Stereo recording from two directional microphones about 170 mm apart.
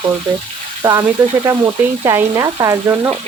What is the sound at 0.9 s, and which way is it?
Frying, 15° right (ahead or behind).